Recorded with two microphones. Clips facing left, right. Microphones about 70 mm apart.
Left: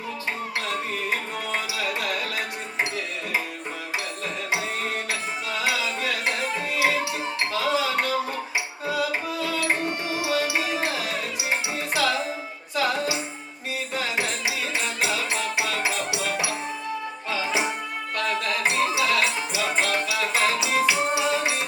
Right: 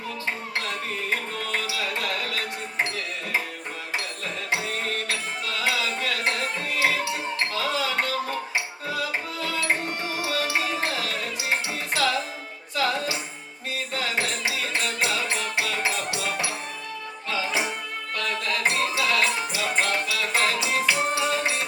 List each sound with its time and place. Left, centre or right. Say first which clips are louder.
1.5 s music: left 1 dB; centre
5.5 s music: even; centre
17.2 s music: left 1 dB; left